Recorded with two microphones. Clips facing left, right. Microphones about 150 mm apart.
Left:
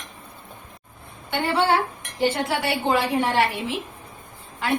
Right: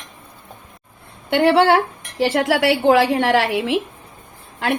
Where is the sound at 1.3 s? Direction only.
80° right.